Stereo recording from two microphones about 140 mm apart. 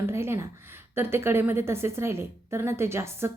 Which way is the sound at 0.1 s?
20° right (ahead or behind).